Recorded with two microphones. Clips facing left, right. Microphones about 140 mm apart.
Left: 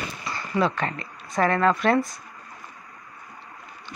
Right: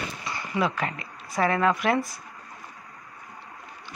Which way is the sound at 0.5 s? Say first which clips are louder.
Left 3 dB; 5° right (ahead or behind).